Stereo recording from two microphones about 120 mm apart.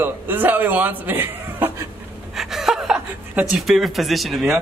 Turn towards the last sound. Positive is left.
turn(degrees=0)  # may be behind; listen again after turning